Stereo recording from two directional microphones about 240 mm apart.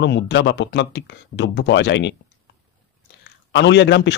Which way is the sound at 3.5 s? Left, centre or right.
Left.